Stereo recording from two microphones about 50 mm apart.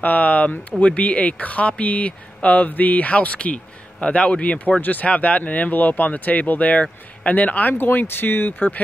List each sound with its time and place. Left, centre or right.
0.0 s speech: left
7.7 s speech: left